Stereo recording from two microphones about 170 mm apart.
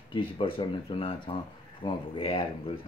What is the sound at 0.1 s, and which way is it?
Speech, 30° left (ahead or behind).